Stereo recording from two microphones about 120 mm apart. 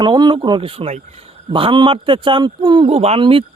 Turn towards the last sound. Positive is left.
turn(degrees=-50)  # may be behind; listen again after turning